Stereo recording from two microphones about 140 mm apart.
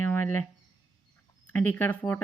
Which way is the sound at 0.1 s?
15° left (ahead or behind).